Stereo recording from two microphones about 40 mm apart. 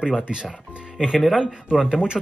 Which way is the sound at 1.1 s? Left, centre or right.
Centre.